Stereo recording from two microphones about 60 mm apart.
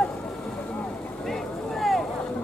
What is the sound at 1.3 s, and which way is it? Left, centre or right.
Vehicle, centre.